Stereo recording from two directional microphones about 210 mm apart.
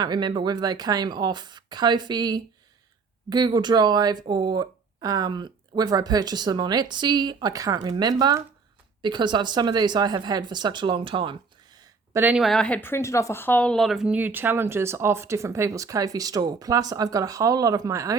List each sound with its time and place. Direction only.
0.0 s a woman's voice: 20° right (ahead or behind)